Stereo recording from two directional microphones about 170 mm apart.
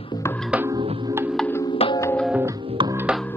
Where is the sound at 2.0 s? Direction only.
15° left (ahead or behind).